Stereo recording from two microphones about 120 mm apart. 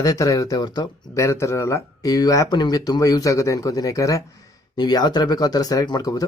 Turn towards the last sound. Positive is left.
turn(degrees=30)  # may be behind; listen again after turning